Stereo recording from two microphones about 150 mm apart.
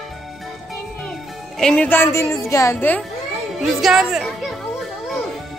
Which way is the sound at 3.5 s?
Centre (ahead or behind).